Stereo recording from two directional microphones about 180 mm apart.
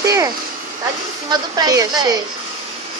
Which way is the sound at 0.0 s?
20° right (ahead or behind).